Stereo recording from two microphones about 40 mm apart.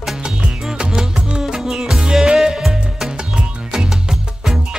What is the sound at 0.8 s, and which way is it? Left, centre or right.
Music, centre.